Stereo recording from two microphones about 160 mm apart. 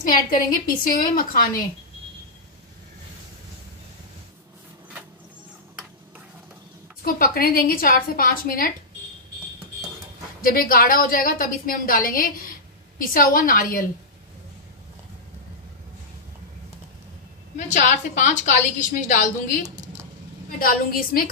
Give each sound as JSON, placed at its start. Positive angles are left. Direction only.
{"t": 0.0, "sound": "a woman's voice", "side_deg": 60}
{"t": 7.0, "sound": "a woman's voice", "side_deg": 65}
{"t": 10.4, "sound": "a woman's voice", "side_deg": 65}
{"t": 17.6, "sound": "a woman's voice", "side_deg": 50}